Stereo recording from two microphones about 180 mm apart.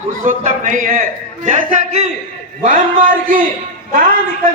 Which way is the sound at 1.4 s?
40° right (ahead or behind).